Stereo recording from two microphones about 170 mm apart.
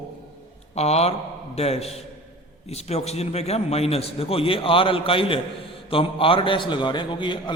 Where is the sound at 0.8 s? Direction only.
40° left (ahead or behind).